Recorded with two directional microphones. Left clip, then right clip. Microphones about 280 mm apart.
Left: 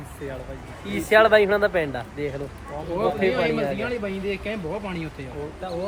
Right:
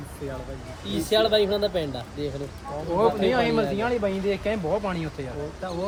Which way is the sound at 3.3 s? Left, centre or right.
Centre.